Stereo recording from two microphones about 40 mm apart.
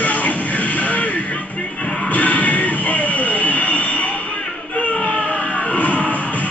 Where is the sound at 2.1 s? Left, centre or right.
Left.